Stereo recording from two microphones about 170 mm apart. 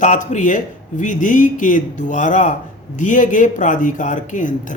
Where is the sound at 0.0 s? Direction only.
45° left (ahead or behind).